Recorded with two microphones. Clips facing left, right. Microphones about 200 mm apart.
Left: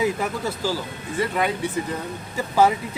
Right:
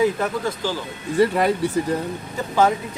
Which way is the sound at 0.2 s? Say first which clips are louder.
Right 2 dB; 10° left (ahead or behind).